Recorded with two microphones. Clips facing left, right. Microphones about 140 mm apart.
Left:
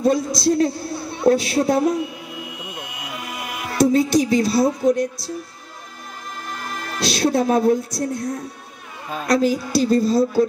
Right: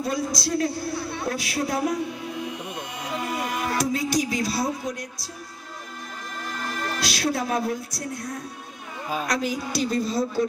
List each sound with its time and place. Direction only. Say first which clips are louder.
0.0 s a man's voice: left 8 dB; 25° left (ahead or behind)
2.6 s vehicle: even; 10° left (ahead or behind)
3.1 s a sound: right 5 dB; 40° right (ahead or behind)
3.7 s a man's voice: left 10 dB; 25° left (ahead or behind)
7.0 s a man's voice: left 9 dB; 25° left (ahead or behind)
9.3 s a woman's voice: left 12 dB; 35° left (ahead or behind)